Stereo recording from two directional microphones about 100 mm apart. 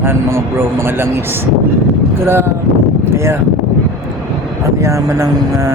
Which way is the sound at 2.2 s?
25° right (ahead or behind).